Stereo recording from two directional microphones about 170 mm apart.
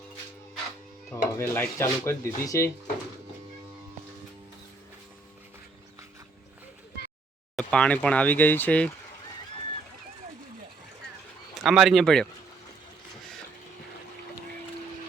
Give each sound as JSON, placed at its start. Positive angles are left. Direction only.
{"t": 1.1, "sound": "speech", "side_deg": 15}
{"t": 7.5, "sound": "speech", "side_deg": 5}
{"t": 11.6, "sound": "speech", "side_deg": 0}